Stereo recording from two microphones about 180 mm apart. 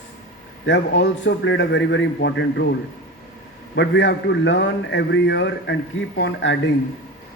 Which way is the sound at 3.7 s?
75° left (ahead or behind).